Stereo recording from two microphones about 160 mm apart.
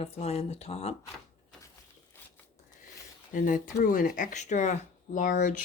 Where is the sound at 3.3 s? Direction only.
60° left (ahead or behind).